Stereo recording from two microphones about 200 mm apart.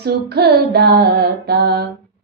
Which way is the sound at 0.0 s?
55° right (ahead or behind).